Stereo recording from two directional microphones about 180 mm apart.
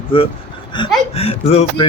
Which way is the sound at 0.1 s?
30° left (ahead or behind).